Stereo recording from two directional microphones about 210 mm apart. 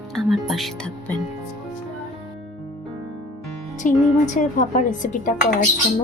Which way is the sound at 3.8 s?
35° left (ahead or behind).